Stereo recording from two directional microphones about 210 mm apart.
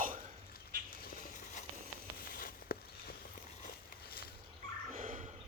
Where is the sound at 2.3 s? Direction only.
45° left (ahead or behind).